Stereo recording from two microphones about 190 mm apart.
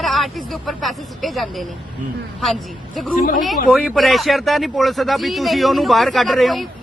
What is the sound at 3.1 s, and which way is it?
Speech, 45° left (ahead or behind).